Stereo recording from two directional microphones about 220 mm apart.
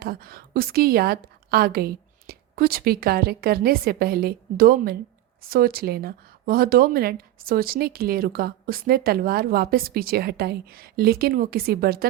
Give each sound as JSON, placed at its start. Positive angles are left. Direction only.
{"t": 0.0, "sound": "speech", "side_deg": -40}